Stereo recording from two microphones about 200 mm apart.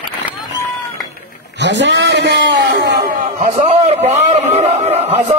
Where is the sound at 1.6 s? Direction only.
60° right (ahead or behind).